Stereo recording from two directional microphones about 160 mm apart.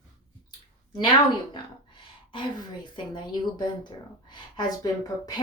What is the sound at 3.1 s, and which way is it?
A woman's voice, 30° left (ahead or behind).